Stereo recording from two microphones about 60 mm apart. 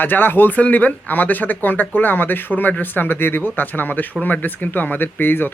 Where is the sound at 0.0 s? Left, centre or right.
Left.